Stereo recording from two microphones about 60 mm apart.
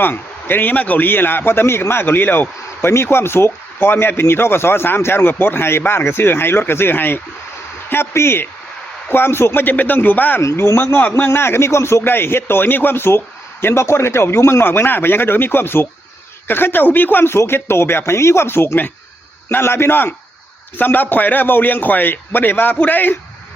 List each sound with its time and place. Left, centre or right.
0.0 s a man's voice: left
10.4 s a man's voice: left